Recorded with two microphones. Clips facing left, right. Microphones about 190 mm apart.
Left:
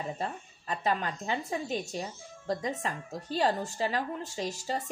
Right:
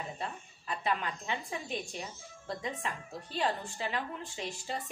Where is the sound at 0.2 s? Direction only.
40° left (ahead or behind).